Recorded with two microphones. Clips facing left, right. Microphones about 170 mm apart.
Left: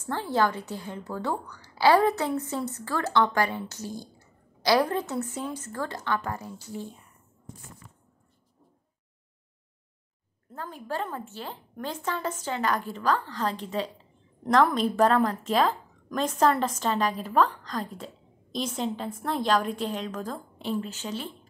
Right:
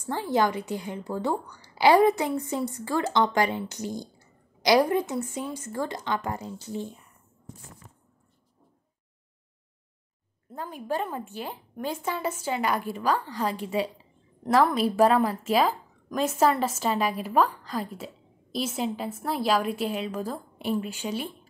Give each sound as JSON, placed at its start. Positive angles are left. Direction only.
{"t": 0.0, "sound": "a woman's voice", "side_deg": -15}
{"t": 10.5, "sound": "a woman's voice", "side_deg": -15}